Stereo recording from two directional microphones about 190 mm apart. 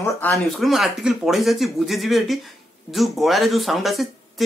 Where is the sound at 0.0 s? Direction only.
15° left (ahead or behind).